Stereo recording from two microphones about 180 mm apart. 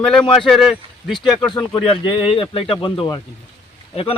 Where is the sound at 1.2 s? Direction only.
25° left (ahead or behind).